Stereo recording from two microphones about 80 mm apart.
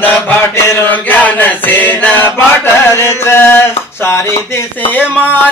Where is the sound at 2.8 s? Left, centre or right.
Left.